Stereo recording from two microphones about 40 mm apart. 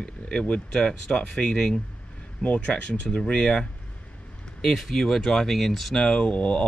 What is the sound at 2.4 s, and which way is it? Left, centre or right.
Speech, left.